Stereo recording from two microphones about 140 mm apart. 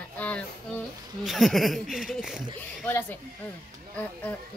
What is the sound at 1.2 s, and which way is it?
Speech, centre (ahead or behind).